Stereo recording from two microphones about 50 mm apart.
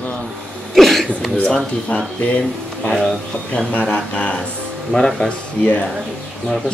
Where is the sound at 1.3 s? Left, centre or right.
Left.